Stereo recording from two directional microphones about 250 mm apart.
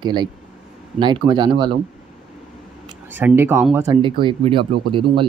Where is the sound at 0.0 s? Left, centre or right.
Centre.